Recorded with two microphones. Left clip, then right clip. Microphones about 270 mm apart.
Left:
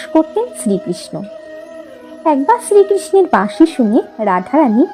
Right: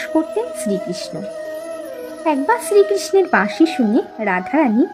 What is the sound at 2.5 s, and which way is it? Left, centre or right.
Speech, centre.